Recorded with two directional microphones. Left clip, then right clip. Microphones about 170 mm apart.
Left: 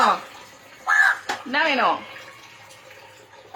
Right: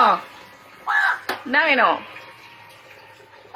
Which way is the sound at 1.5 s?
15° right (ahead or behind).